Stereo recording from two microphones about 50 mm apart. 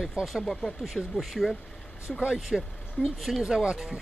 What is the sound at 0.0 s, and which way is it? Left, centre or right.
Speech, centre.